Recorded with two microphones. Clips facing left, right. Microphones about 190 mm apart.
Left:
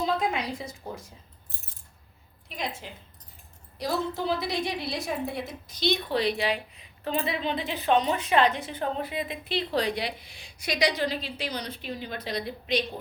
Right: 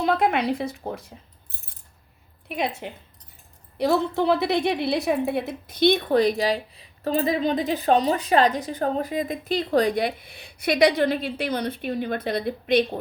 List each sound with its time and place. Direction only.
0.0 s a woman's voice: 65° right (ahead or behind)
2.5 s a woman's voice: 60° right (ahead or behind)